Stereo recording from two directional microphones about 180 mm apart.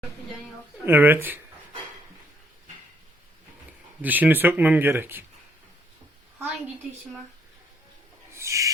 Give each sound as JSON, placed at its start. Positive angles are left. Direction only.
{"t": 0.9, "sound": "speech", "side_deg": -10}
{"t": 4.0, "sound": "speech", "side_deg": -10}
{"t": 8.3, "sound": "owl", "side_deg": -15}